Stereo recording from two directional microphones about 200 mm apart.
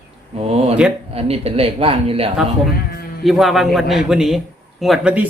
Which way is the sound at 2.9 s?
50° left (ahead or behind).